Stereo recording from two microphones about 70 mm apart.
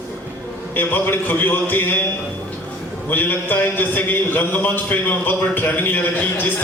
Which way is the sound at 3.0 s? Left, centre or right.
Left.